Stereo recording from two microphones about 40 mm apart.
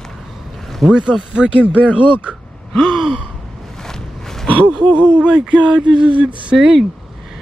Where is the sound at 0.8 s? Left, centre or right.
Right.